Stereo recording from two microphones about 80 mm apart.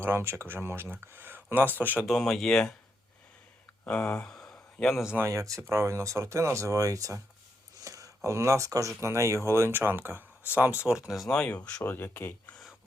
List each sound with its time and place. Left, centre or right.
0.0 s speech: right
2.0 s speech: centre
3.8 s speech: centre
5.1 s speech: right
10.8 s speech: centre
11.3 s speech: centre
11.8 s speech: left